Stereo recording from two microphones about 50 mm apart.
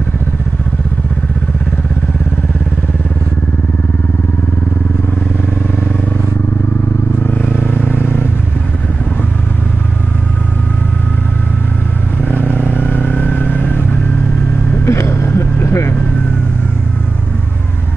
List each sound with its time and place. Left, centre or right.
7.2 s vehicle: left
12.3 s vehicle: left
14.9 s vehicle: left